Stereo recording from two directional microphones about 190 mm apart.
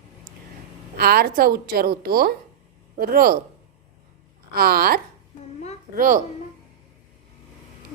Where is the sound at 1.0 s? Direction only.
55° right (ahead or behind).